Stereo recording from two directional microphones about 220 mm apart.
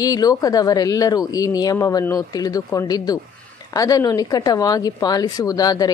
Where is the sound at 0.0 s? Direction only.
15° left (ahead or behind).